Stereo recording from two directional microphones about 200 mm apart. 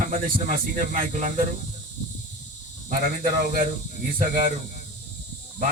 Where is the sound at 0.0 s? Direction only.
45° right (ahead or behind).